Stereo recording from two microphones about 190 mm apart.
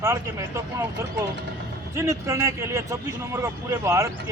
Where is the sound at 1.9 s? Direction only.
15° right (ahead or behind).